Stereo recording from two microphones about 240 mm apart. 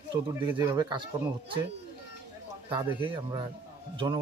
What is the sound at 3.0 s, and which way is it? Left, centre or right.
Speech, centre.